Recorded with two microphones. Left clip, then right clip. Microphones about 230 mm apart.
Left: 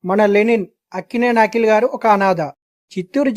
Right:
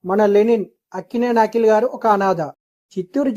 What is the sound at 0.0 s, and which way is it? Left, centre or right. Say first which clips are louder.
Speech: left 1 dB; left.